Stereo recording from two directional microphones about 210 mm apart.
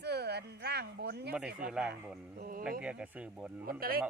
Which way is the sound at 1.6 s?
5° right (ahead or behind).